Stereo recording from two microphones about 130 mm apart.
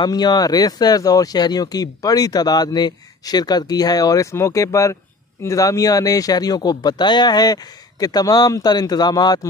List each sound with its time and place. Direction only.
0.0 s speech: 30° left (ahead or behind)